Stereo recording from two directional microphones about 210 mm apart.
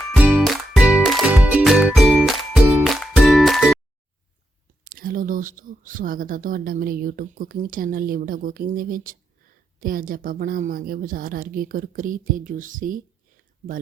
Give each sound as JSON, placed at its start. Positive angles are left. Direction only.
{"t": 0.1, "sound": "music", "side_deg": -5}
{"t": 4.9, "sound": "a woman's voice", "side_deg": -40}